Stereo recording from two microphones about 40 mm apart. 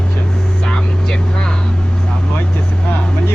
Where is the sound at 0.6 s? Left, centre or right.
Left.